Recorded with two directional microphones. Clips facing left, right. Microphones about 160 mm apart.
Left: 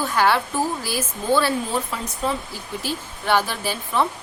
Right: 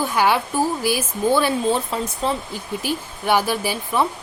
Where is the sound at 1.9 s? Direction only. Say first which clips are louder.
Right 5 dB; 30° right (ahead or behind).